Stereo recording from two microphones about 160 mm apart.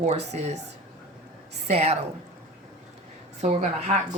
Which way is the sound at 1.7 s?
40° right (ahead or behind).